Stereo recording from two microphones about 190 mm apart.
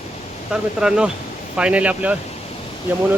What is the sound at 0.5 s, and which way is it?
Speech, 5° right (ahead or behind).